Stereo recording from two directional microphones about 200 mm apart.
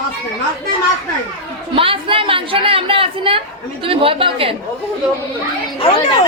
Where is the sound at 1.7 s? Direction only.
25° right (ahead or behind).